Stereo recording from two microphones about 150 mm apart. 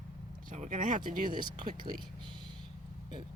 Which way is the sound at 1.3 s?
30° right (ahead or behind).